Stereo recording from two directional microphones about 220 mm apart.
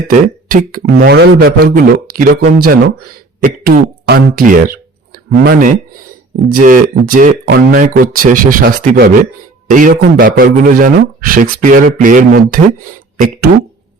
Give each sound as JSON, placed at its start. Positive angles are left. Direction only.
{"t": 0.1, "sound": "a man's voice", "side_deg": -40}